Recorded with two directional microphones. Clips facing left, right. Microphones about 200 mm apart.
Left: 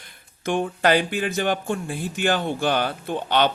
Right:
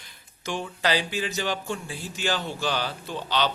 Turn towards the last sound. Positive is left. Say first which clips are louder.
# left 6 dB
turn(degrees=55)  # may be behind; listen again after turning